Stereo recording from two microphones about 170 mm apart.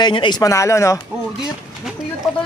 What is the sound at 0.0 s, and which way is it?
Speech, 25° left (ahead or behind).